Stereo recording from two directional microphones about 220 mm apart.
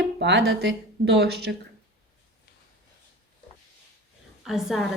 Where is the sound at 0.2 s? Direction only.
50° right (ahead or behind).